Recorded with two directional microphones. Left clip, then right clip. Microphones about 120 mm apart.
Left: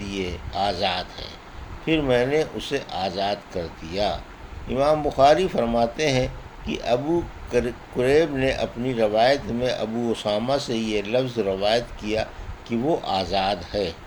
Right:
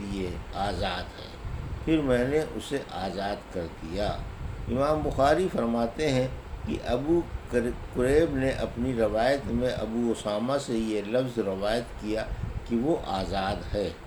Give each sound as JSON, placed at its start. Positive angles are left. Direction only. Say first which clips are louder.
{"t": 0.1, "sound": "speech", "louder": "left 7 dB", "side_deg": 40}